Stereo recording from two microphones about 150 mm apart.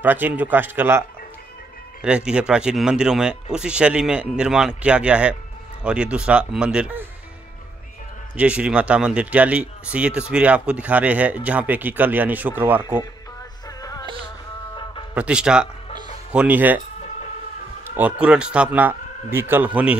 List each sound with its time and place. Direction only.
0.0 s speech: 10° right (ahead or behind)
8.4 s speech: 5° right (ahead or behind)
13.7 s music: 25° left (ahead or behind)
15.1 s speech: 5° right (ahead or behind)
17.9 s speech: 10° right (ahead or behind)